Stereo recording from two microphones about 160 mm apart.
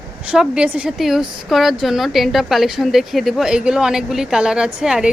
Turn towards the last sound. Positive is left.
turn(degrees=-5)  # may be behind; listen again after turning